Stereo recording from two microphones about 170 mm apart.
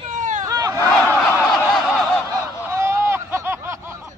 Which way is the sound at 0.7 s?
10° left (ahead or behind).